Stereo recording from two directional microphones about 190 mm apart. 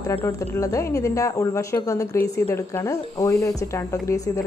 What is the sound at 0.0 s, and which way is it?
Speech, 15° left (ahead or behind).